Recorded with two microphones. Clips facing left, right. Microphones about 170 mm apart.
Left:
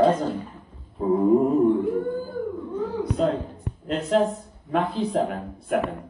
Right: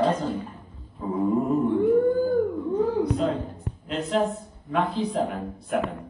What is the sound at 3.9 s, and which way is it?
Speech, 45° left (ahead or behind).